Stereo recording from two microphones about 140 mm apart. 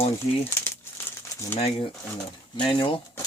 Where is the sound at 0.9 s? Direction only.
15° left (ahead or behind).